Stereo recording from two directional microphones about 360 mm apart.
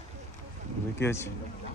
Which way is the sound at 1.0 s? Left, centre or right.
Centre.